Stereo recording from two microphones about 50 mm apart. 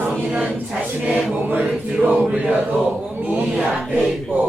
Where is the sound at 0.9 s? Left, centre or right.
Right.